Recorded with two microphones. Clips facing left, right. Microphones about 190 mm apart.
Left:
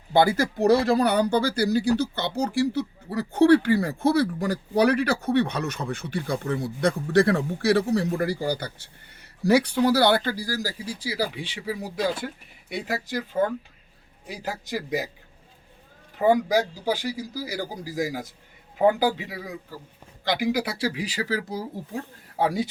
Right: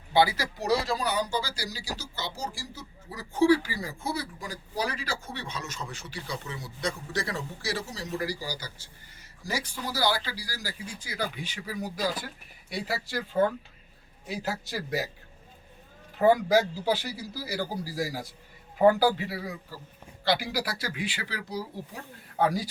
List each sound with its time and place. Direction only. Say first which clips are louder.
0.1 s speech: left 4 dB; 50° left (ahead or behind); by 15.1 s 15° left (ahead or behind)
16.1 s speech: left 1 dB; 15° left (ahead or behind)
20.2 s speech: left 4 dB; 15° left (ahead or behind); by 22.0 s 45° left (ahead or behind)
22.4 s a man's voice: left 2 dB; 25° left (ahead or behind)